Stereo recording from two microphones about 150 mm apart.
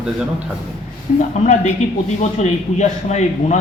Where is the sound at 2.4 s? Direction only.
50° left (ahead or behind).